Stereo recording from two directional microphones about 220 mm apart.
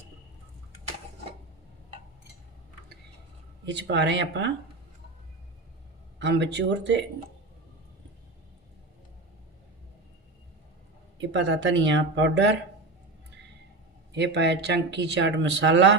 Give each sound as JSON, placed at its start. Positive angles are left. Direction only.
{"t": 3.7, "sound": "speech", "side_deg": -55}
{"t": 6.1, "sound": "speech", "side_deg": -55}
{"t": 11.2, "sound": "speech", "side_deg": -55}
{"t": 14.1, "sound": "speech", "side_deg": -50}